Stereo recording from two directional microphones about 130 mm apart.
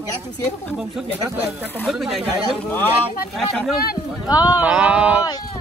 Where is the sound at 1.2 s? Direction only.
15° right (ahead or behind).